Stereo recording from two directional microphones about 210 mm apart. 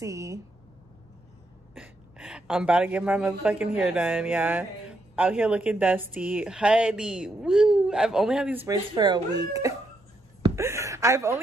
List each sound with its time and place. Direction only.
0.0 s speech: 15° right (ahead or behind)
1.8 s speech: 5° right (ahead or behind)
8.9 s speech: 20° right (ahead or behind)
10.4 s a sound: 15° right (ahead or behind)